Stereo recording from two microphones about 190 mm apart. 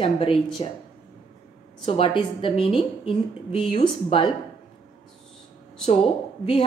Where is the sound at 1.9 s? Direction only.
30° left (ahead or behind).